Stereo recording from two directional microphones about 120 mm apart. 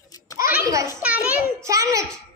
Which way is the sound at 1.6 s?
25° right (ahead or behind).